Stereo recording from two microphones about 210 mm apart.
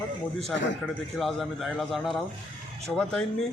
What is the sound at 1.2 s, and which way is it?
Speech, centre (ahead or behind).